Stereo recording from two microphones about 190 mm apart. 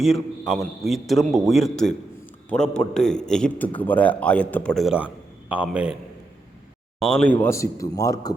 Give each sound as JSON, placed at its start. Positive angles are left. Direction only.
{"t": 0.0, "sound": "a man's voice", "side_deg": 0}
{"t": 7.0, "sound": "speech", "side_deg": 5}